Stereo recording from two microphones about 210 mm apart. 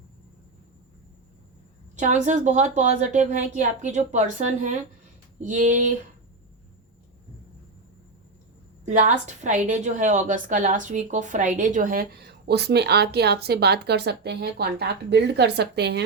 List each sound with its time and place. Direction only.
2.0 s a woman's voice: 35° right (ahead or behind)
8.8 s a woman's voice: 35° right (ahead or behind); by 16.0 s 50° right (ahead or behind)